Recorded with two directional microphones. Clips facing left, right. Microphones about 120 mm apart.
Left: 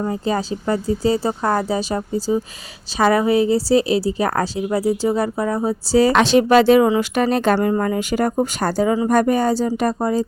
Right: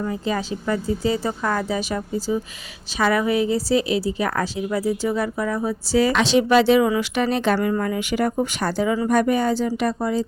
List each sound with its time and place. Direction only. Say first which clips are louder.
0.0 s a woman's voice: left 3 dB; 35° left (ahead or behind)
6.1 s a woman's voice: left 3 dB; 50° left (ahead or behind)